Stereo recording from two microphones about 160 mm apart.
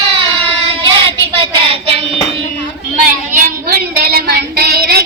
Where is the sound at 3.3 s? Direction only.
60° right (ahead or behind); by 5.0 s 85° right.